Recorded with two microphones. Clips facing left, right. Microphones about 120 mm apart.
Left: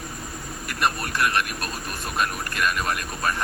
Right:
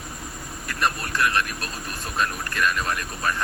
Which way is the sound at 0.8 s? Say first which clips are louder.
Even; 15° left (ahead or behind).